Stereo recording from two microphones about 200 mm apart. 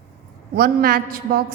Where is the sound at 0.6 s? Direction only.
45° right (ahead or behind).